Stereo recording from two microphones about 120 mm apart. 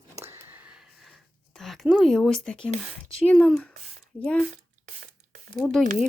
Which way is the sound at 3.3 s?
Centre (ahead or behind).